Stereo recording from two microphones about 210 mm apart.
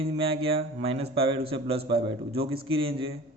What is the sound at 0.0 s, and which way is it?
Speech, 25° right (ahead or behind).